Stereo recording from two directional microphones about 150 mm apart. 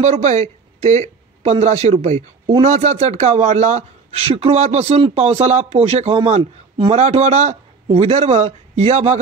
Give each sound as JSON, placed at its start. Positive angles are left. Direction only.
{"t": 0.0, "sound": "a man's voice", "side_deg": -50}